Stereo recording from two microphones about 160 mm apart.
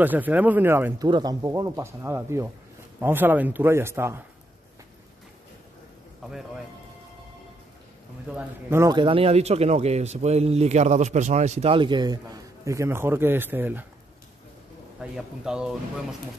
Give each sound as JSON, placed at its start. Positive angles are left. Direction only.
{"t": 0.0, "sound": "speech", "side_deg": -10}
{"t": 1.0, "sound": "speech", "side_deg": -25}
{"t": 8.3, "sound": "speech", "side_deg": -10}
{"t": 8.9, "sound": "speech", "side_deg": -35}
{"t": 15.0, "sound": "speech", "side_deg": -5}